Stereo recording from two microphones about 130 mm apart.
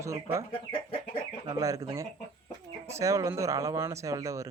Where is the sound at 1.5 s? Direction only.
25° right (ahead or behind).